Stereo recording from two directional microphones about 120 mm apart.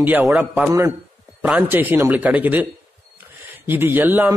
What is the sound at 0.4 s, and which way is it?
A man's voice, 15° right (ahead or behind).